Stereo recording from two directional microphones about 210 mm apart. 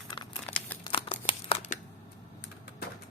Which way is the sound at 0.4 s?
5° left (ahead or behind).